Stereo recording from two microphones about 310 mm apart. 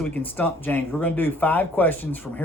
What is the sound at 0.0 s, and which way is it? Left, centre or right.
Speech, centre.